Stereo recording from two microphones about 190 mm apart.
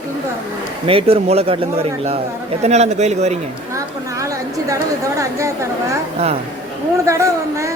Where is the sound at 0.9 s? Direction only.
30° right (ahead or behind).